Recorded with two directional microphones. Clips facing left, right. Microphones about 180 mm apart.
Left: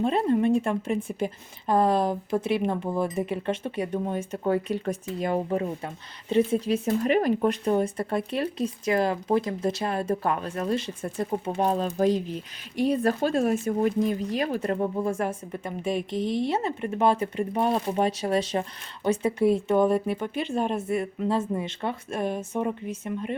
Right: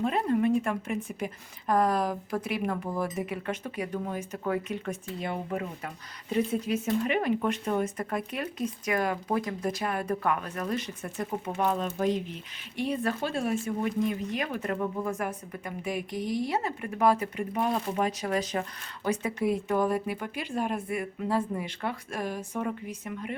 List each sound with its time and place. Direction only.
0.0 s a woman's voice: 30° left (ahead or behind)